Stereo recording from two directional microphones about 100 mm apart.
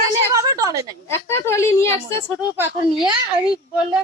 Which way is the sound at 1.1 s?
25° left (ahead or behind).